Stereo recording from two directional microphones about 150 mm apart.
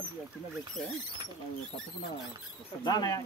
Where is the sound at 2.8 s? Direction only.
25° left (ahead or behind).